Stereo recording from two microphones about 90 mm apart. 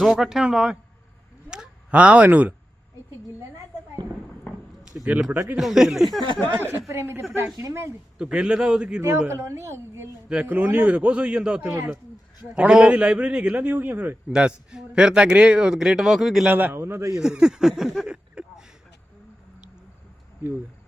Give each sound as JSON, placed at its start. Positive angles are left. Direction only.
{"t": 0.0, "sound": "a man's voice", "side_deg": 0}
{"t": 1.5, "sound": "a sound", "side_deg": -10}
{"t": 4.9, "sound": "a man's voice", "side_deg": -15}
{"t": 5.5, "sound": "a man's voice", "side_deg": -5}
{"t": 6.6, "sound": "a man's voice", "side_deg": -25}
{"t": 8.2, "sound": "a man's voice", "side_deg": -10}
{"t": 9.0, "sound": "a man's voice", "side_deg": -25}
{"t": 11.7, "sound": "a woman's voice", "side_deg": -30}
{"t": 12.5, "sound": "a man's voice", "side_deg": -10}
{"t": 14.3, "sound": "a man's voice", "side_deg": -10}
{"t": 16.5, "sound": "a man's voice", "side_deg": -20}
{"t": 17.1, "sound": "speech", "side_deg": -10}